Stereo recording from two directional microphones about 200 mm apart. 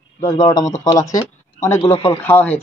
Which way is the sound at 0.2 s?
15° left (ahead or behind).